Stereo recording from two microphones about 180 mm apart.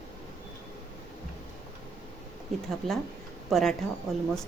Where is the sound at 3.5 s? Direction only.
Centre (ahead or behind).